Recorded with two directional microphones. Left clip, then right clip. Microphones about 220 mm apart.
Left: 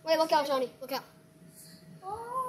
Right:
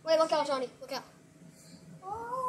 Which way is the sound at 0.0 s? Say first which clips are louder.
Left 1 dB; 25° left (ahead or behind).